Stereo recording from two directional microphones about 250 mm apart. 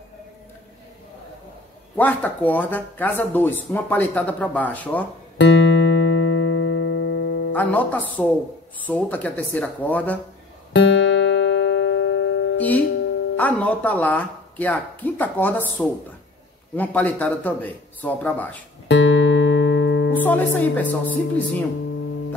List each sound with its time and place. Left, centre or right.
2.0 s speech: centre
5.4 s music: left
7.5 s speech: centre
10.7 s music: left
12.5 s music: centre
13.4 s speech: centre
18.9 s music: left
20.2 s speech: centre